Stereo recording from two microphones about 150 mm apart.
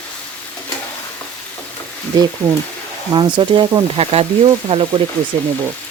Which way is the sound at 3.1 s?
30° right (ahead or behind).